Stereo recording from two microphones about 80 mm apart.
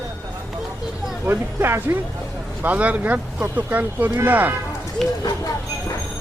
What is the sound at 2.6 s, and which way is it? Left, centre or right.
Speech, right.